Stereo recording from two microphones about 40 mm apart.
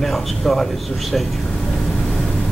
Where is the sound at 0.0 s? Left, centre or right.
Centre.